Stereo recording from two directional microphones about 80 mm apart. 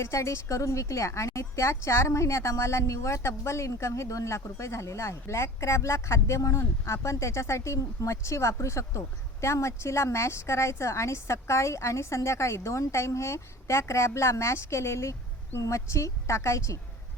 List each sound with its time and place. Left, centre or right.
0.0 s a woman's voice: left